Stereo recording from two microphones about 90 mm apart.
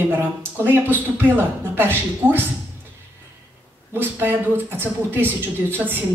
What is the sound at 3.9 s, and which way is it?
A man's voice, 20° right (ahead or behind).